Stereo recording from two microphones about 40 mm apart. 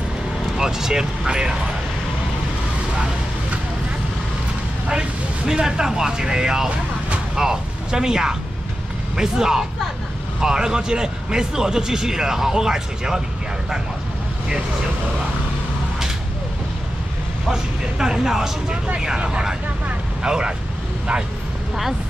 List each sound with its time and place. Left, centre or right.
0.6 s a man's voice: centre
4.8 s a man's voice: centre
17.5 s a man's voice: centre